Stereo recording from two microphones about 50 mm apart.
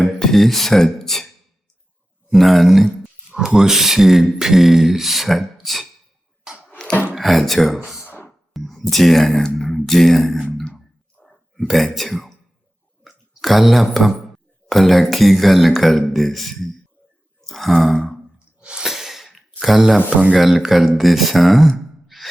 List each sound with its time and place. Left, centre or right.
0.0 s speech: centre
2.3 s speech: centre
3.2 s speech: centre
6.7 s a sound: centre
7.2 s speech: centre
11.2 s a sound: centre
11.7 s speech: centre
17.4 s sigh: centre
18.6 s snort: centre
18.9 s a sound: centre
20.3 s speech: centre